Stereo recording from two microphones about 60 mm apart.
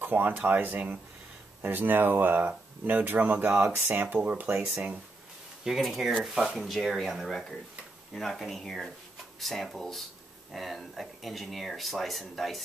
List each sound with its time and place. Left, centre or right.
0.0 s speech: right
3.6 s speech: right
5.7 s speech: centre
6.7 s speech: centre